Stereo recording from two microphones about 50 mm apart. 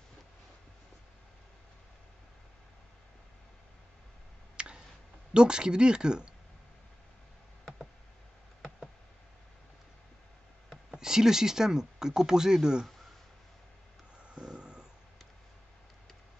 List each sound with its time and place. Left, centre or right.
4.6 s a sound: centre
5.3 s speech: centre
11.0 s speech: centre
14.3 s vehicle: centre